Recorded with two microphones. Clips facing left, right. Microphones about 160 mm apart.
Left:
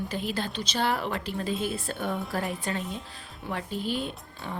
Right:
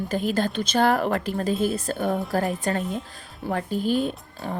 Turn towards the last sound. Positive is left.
turn(degrees=-40)  # may be behind; listen again after turning